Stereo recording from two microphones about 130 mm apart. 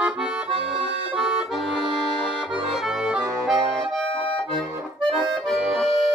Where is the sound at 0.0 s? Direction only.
10° right (ahead or behind).